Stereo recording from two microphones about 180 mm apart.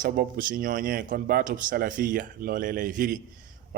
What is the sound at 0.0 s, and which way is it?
A man's voice, 50° right (ahead or behind).